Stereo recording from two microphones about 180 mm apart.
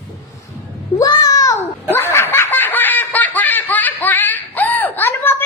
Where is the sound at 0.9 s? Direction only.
20° left (ahead or behind).